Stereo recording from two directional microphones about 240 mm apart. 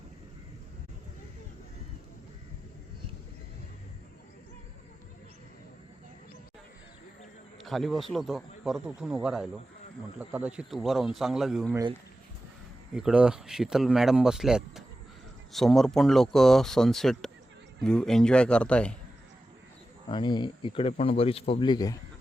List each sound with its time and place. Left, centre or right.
7.6 s speech: centre
12.9 s speech: centre
20.1 s speech: centre